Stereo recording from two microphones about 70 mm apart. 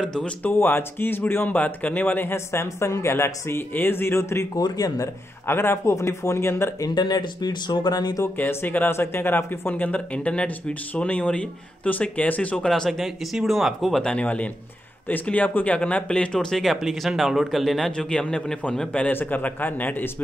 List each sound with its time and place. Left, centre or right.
0.2 s speech: left
4.6 s speech: left
5.5 s speech: left
6.8 s speech: left
8.4 s speech: left; by 14.0 s centre
14.0 s speech: centre